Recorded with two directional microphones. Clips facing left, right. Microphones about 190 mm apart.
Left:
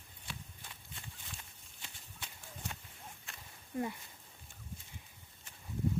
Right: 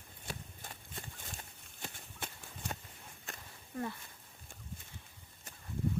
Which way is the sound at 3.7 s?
20° left (ahead or behind).